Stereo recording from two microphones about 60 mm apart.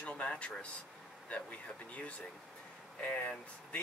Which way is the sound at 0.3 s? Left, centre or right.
Centre.